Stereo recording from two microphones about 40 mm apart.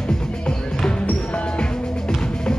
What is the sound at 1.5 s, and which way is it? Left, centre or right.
Music, centre.